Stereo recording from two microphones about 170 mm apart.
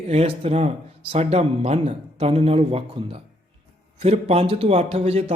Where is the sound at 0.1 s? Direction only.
35° right (ahead or behind).